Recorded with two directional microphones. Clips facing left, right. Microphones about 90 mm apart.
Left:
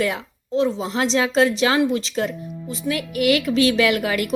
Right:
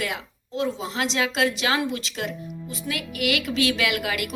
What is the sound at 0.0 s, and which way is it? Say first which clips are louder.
Speech: left 7 dB; 35° left (ahead or behind).